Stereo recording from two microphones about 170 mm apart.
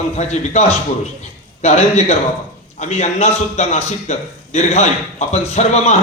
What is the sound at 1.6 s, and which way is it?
A man's voice, 40° left (ahead or behind).